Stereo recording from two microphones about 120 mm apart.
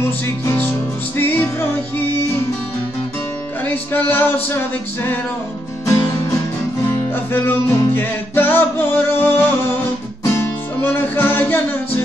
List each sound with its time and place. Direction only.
0.5 s music: 15° left (ahead or behind)
3.6 s music: 15° left (ahead or behind)
7.4 s music: 15° left (ahead or behind)